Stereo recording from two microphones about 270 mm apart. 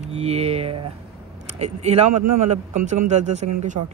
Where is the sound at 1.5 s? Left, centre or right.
Right.